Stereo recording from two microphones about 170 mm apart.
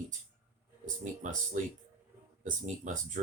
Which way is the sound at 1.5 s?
50° right (ahead or behind).